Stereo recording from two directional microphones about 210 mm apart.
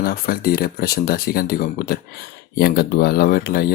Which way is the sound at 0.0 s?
45° left (ahead or behind).